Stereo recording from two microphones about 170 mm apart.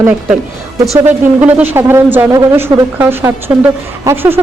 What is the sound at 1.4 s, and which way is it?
Speech, 10° right (ahead or behind).